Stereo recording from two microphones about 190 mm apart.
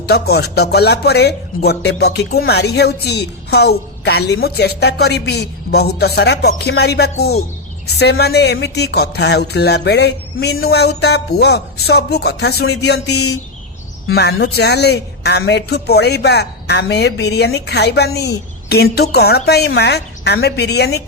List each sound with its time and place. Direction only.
0.0 s speech: 60° left (ahead or behind)